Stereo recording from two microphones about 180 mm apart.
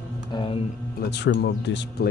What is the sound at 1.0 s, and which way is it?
Speech, 65° left (ahead or behind).